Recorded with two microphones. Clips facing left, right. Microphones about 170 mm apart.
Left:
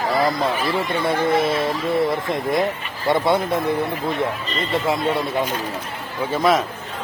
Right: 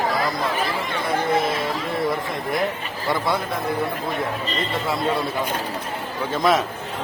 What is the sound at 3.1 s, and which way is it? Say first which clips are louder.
Speech: left 5 dB; 25° left (ahead or behind).